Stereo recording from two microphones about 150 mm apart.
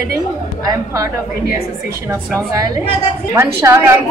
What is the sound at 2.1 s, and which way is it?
A woman's voice, 20° right (ahead or behind).